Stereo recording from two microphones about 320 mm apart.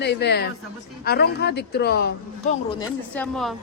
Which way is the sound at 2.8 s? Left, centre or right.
Centre.